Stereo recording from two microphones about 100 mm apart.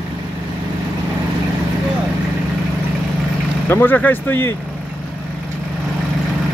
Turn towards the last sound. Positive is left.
turn(degrees=20)  # may be behind; listen again after turning